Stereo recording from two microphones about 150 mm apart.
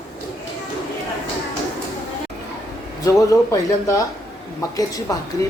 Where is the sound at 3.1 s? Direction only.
20° left (ahead or behind).